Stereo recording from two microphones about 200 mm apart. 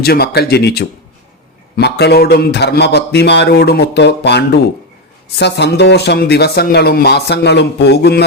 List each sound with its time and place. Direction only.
0.0 s speech: 50° left (ahead or behind)